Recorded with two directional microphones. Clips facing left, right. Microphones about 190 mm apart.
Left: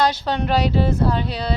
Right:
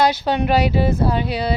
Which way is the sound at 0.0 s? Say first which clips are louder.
Right 3 dB; 10° right (ahead or behind).